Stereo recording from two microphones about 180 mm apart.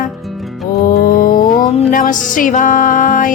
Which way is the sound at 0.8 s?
50° left (ahead or behind).